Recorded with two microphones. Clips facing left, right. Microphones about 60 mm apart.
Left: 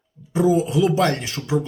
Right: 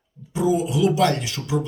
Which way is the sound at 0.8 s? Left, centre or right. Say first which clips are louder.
Even; left.